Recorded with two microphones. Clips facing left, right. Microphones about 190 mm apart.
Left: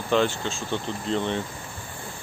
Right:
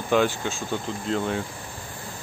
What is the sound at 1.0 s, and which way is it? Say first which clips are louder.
Speech: even; 5° right (ahead or behind).